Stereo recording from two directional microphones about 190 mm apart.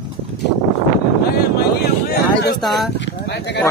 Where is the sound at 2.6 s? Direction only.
Centre (ahead or behind).